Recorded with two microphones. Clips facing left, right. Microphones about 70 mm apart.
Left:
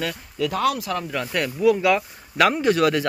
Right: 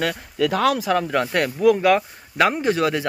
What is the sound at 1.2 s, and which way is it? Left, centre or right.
Speech, right.